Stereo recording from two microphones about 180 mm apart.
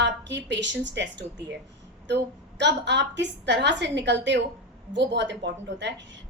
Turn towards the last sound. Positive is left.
turn(degrees=-80)